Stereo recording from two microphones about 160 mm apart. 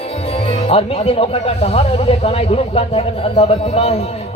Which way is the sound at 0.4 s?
35° left (ahead or behind).